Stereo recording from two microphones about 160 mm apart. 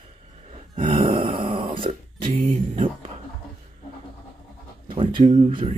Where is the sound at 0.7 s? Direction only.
35° right (ahead or behind).